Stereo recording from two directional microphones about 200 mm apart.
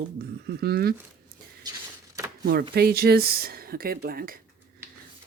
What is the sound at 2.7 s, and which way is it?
Speech, 50° right (ahead or behind).